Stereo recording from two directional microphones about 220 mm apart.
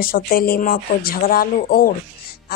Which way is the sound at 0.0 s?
40° left (ahead or behind).